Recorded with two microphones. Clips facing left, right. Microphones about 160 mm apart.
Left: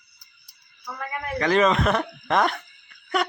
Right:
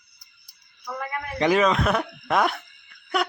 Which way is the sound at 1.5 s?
Centre (ahead or behind).